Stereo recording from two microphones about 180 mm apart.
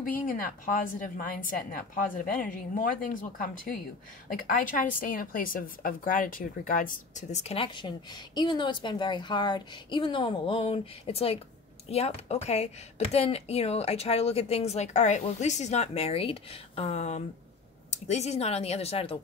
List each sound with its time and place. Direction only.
0.8 s a woman's voice: 50° left (ahead or behind); by 19.1 s 35° left (ahead or behind)